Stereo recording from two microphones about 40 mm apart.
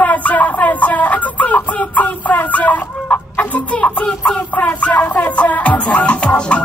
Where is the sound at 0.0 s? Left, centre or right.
Left.